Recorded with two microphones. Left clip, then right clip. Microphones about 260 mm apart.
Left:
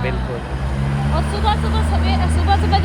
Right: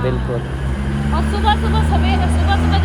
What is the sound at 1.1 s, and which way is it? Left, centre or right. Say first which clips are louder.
Speech: right 3 dB; centre.